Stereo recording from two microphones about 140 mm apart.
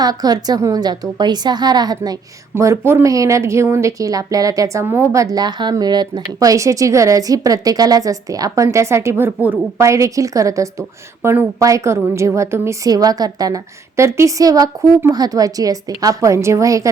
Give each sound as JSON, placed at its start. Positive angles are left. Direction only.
{"t": 0.0, "sound": "speech", "side_deg": -30}